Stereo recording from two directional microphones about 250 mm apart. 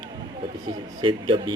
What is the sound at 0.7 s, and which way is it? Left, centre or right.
Speech, centre.